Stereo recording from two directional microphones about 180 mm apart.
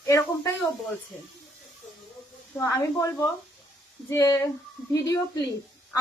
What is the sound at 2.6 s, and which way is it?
A woman's voice, 15° left (ahead or behind).